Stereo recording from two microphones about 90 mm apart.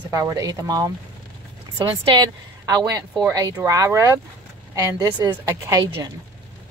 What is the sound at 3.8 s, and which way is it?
A woman's voice, 35° right (ahead or behind).